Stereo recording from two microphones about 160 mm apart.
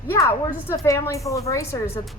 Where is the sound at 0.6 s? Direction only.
20° left (ahead or behind).